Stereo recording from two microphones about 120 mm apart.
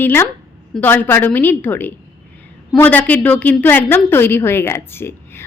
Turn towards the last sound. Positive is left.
turn(degrees=20)  # may be behind; listen again after turning